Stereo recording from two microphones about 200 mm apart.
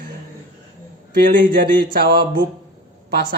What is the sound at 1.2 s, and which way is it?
Speech, 45° right (ahead or behind).